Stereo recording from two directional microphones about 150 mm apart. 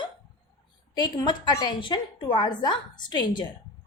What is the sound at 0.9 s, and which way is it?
A woman's voice, 30° left (ahead or behind).